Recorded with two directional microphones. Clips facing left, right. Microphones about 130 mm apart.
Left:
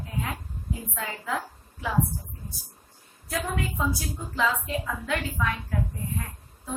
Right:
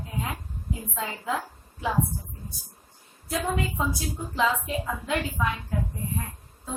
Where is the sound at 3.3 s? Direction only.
20° right (ahead or behind).